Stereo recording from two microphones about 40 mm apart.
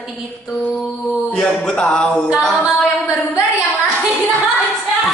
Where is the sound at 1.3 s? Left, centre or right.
Left.